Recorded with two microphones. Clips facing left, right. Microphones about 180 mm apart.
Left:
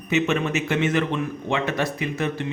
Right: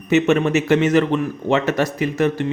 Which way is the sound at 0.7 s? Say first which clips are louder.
Right 7 dB; 40° right (ahead or behind).